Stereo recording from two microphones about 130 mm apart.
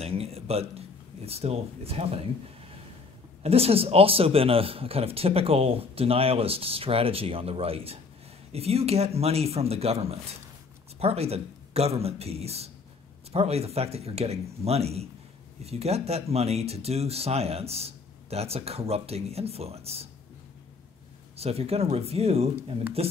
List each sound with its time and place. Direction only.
0.0 s a man's voice: 50° right (ahead or behind)
21.4 s a man's voice: 50° right (ahead or behind)